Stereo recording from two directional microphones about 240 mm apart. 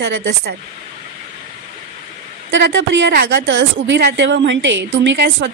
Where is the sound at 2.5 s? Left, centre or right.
Right.